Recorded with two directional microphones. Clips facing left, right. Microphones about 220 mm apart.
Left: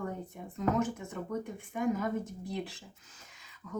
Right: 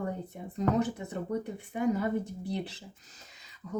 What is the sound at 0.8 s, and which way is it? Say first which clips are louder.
Speech: right 2 dB; 70° right (ahead or behind).